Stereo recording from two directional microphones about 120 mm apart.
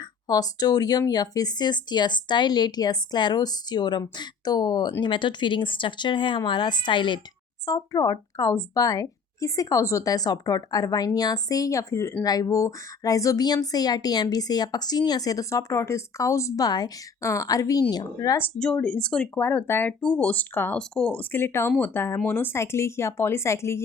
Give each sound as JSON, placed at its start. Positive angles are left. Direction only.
{"t": 0.3, "sound": "speech", "side_deg": 35}
{"t": 7.6, "sound": "speech", "side_deg": 30}
{"t": 18.6, "sound": "speech", "side_deg": 10}